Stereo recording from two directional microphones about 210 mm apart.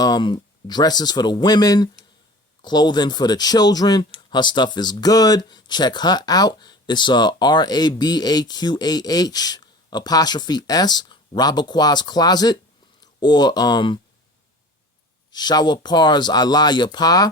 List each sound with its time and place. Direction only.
0.0 s speech: 20° left (ahead or behind)
15.3 s speech: 20° left (ahead or behind)